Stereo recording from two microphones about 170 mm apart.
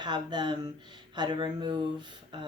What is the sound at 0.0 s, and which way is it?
Speech, 25° right (ahead or behind).